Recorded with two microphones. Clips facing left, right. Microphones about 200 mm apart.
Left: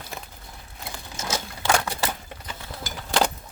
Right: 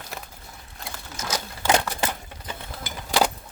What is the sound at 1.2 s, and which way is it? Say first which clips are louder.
Crumpling: left 1 dB; 25° left (ahead or behind).